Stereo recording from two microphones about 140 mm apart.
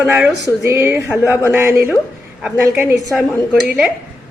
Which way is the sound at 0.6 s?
15° right (ahead or behind).